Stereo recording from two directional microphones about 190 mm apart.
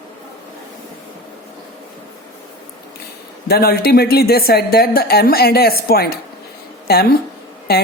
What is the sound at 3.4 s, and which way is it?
A woman's voice, 55° left (ahead or behind).